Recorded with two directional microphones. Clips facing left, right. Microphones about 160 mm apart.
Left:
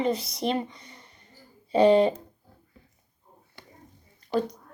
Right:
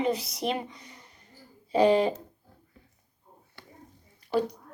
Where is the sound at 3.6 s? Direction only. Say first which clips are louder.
Even; 15° left (ahead or behind).